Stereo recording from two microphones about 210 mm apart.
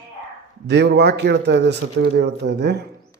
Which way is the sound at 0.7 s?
50° right (ahead or behind).